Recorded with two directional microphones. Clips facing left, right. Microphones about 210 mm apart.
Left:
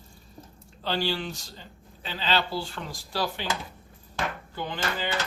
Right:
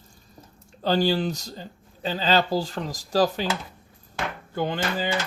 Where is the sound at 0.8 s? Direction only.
40° right (ahead or behind).